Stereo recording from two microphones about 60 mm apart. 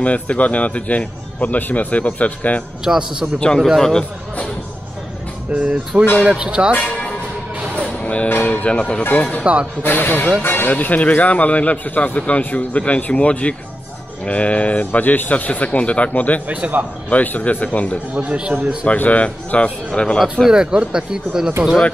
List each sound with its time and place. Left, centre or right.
0.0 s a man's voice: left
2.8 s speech: centre
3.5 s a man's voice: centre
5.5 s speech: right
7.5 s music: right
7.8 s music: centre
8.3 s a man's voice: left
9.4 s speech: centre
9.8 s a man's voice: left
16.4 s speech: right
17.1 s a man's voice: left
18.1 s speech: centre
18.9 s a man's voice: left
20.4 s speech: centre